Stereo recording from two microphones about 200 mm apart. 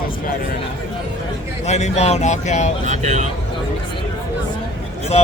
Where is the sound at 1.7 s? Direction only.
35° left (ahead or behind).